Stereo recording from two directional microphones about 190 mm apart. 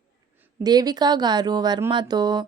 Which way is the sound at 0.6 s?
20° right (ahead or behind).